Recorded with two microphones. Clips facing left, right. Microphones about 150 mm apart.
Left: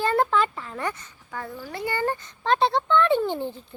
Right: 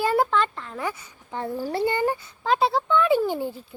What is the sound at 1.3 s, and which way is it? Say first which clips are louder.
Speech: right 7 dB; 25° right (ahead or behind).